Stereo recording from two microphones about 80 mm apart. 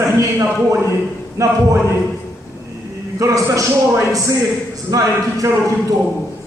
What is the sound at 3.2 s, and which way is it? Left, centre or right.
A man's voice, right.